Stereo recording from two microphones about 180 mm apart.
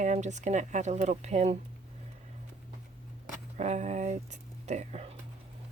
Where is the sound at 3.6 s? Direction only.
40° right (ahead or behind).